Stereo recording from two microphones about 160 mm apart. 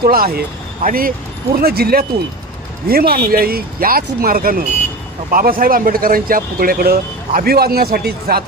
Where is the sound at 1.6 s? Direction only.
70° right (ahead or behind).